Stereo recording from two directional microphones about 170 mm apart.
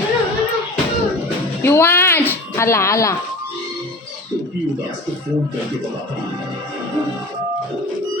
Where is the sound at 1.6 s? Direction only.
10° left (ahead or behind).